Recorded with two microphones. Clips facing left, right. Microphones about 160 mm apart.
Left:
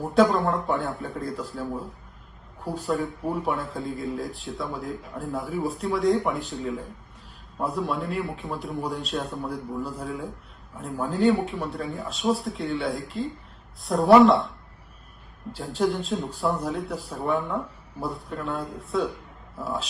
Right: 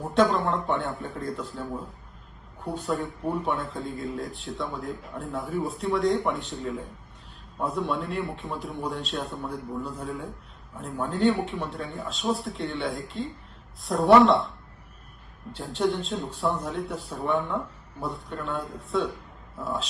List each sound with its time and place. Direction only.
0.0 s speech: centre (ahead or behind)
15.5 s speech: centre (ahead or behind)